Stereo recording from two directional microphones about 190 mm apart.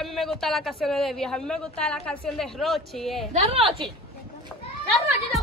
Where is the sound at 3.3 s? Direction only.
30° right (ahead or behind).